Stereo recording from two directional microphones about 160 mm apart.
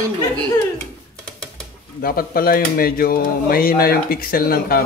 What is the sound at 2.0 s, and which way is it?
Speech, 65° left (ahead or behind).